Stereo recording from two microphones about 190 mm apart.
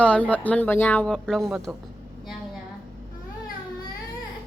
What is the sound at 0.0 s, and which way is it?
Speech, 5° left (ahead or behind).